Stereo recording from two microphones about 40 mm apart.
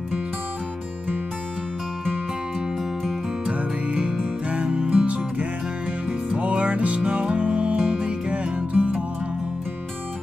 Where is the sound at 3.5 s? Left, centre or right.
Right.